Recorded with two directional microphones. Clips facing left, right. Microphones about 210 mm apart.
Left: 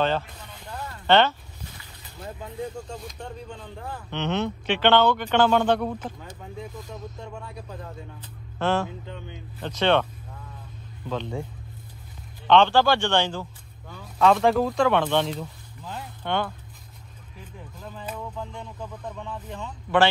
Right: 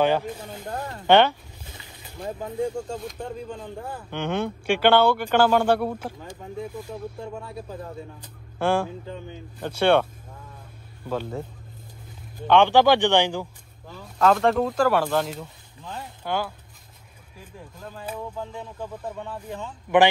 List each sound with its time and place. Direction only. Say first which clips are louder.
0.0 s speech: right 3 dB; 10° right (ahead or behind)
0.4 s snake: right 6 dB; 50° right (ahead or behind)
1.0 s boat: right 2 dB; 10° right (ahead or behind)
2.9 s speech: right 5 dB; 5° right (ahead or behind)
11.1 s speech: right 1 dB; 5° right (ahead or behind)
12.4 s speech: right 2 dB; 15° right (ahead or behind)
13.8 s speech: even; centre (ahead or behind)
17.8 s speech: right 2 dB; 5° right (ahead or behind)